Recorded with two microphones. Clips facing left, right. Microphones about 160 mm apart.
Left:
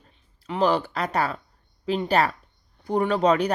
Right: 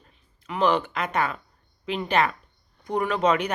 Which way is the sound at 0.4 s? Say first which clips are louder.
Left 1 dB; 35° left (ahead or behind).